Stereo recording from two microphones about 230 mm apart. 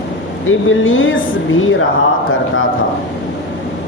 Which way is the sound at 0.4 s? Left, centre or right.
Left.